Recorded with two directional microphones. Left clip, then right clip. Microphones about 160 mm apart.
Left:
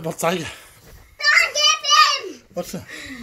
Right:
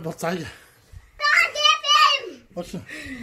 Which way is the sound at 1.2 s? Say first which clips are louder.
Left 2 dB; 60° right (ahead or behind).